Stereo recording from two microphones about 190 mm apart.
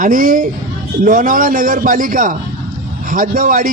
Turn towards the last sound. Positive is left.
turn(degrees=-45)  # may be behind; listen again after turning